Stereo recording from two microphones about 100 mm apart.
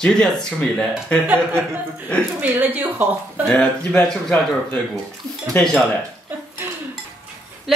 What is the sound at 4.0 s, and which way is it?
Speech, 10° left (ahead or behind).